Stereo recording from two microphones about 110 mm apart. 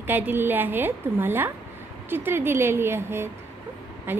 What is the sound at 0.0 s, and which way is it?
A woman's voice, 15° right (ahead or behind).